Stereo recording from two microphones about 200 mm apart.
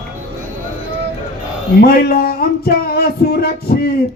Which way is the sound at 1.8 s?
50° left (ahead or behind).